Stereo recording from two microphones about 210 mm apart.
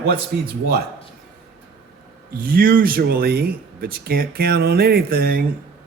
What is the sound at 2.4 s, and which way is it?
Speech, 45° right (ahead or behind).